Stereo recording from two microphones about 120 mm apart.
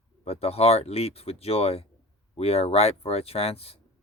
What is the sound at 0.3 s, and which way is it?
Speech, 55° left (ahead or behind).